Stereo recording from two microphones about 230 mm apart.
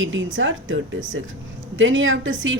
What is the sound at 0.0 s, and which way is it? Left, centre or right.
A woman's voice, right.